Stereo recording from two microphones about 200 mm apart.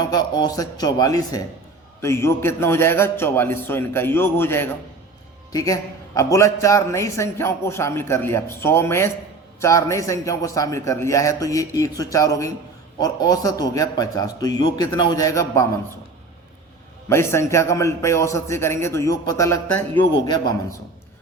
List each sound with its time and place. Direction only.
0.0 s a man's voice: 20° left (ahead or behind)
17.1 s a man's voice: 15° left (ahead or behind)